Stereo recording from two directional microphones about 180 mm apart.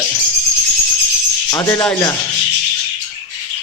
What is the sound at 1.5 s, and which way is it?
Speech, 15° left (ahead or behind).